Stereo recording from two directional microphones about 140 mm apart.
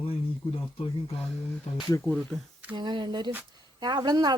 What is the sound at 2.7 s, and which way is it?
Speech, 35° right (ahead or behind).